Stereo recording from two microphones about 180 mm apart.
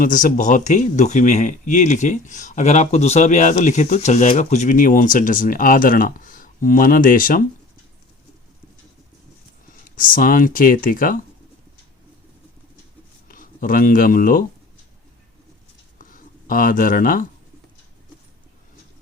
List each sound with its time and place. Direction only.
0.0 s speech: 50° left (ahead or behind)
9.9 s speech: 50° left (ahead or behind)
13.2 s speech: 50° left (ahead or behind)
16.0 s writing: 50° left (ahead or behind)